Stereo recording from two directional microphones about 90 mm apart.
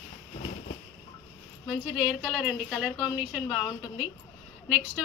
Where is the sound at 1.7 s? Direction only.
10° right (ahead or behind).